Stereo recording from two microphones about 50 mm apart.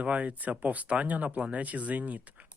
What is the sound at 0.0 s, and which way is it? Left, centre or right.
Speech, right.